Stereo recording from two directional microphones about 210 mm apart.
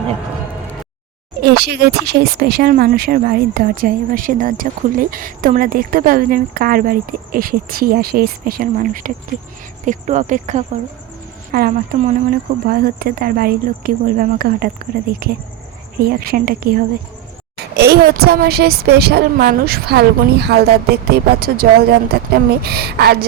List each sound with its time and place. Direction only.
1.4 s speech: 50° right (ahead or behind)